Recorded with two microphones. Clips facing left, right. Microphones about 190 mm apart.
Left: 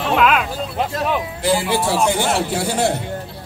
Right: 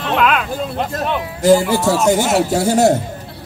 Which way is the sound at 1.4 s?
45° right (ahead or behind).